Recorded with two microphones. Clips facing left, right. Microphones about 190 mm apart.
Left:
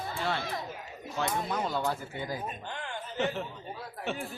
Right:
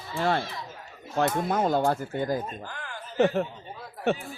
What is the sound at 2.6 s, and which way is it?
Chuckle, 25° left (ahead or behind).